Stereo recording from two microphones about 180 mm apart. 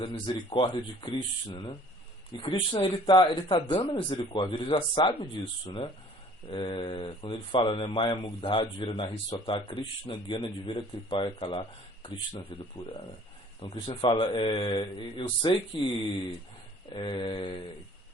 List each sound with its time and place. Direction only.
0.0 s speech: 25° left (ahead or behind)
16.9 s speech: 25° left (ahead or behind)